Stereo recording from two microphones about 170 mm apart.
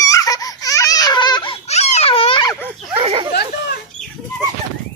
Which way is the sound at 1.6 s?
40° left (ahead or behind).